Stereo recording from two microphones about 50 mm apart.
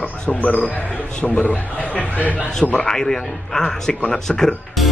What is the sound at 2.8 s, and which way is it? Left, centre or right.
A man's voice, centre.